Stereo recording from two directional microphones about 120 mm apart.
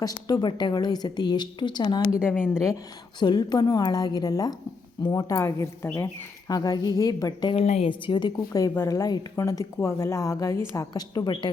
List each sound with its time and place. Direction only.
0.0 s a woman's voice: 35° left (ahead or behind)
2.4 s speech: 5° right (ahead or behind)
3.2 s a woman's voice: 35° left (ahead or behind)
7.5 s a woman's voice: 60° left (ahead or behind)
7.9 s a woman's voice: 40° left (ahead or behind)